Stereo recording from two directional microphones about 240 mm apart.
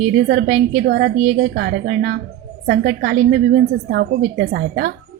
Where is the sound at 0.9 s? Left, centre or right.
Right.